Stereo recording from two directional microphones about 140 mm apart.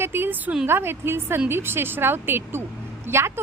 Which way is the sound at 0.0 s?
15° right (ahead or behind).